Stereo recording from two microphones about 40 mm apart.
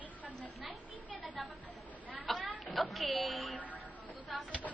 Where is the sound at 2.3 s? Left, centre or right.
Centre.